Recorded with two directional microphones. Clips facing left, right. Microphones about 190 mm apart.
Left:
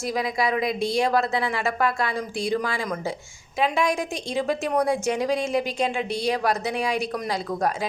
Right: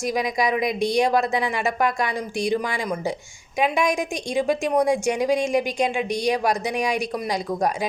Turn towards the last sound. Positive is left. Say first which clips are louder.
# right 2 dB
turn(degrees=-15)  # may be behind; listen again after turning